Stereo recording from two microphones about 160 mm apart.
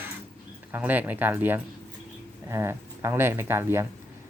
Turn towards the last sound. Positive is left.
turn(degrees=-15)  # may be behind; listen again after turning